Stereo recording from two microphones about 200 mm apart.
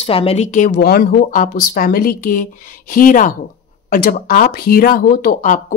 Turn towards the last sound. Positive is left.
turn(degrees=40)  # may be behind; listen again after turning